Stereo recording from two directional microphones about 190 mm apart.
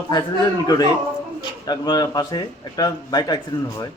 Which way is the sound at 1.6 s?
20° left (ahead or behind).